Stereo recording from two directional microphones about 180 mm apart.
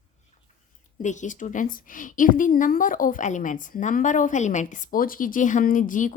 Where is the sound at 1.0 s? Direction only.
45° left (ahead or behind).